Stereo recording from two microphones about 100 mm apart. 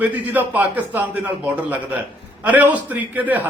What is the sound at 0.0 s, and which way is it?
A man's voice, 15° right (ahead or behind).